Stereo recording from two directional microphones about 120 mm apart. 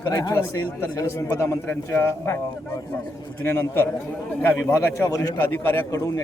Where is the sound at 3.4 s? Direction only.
20° left (ahead or behind).